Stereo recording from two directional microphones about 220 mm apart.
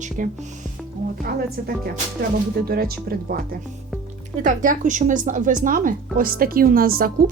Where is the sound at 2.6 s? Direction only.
45° right (ahead or behind).